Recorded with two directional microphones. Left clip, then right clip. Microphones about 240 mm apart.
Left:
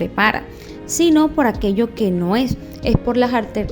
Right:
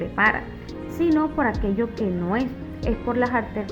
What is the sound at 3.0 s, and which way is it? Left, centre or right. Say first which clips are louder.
Speech: left 4 dB; left.